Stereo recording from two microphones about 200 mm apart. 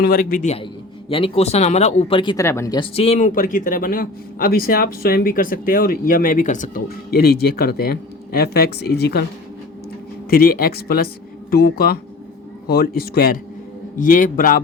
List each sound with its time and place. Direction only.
0.0 s speech: 50° left (ahead or behind)
10.2 s speech: 50° left (ahead or behind)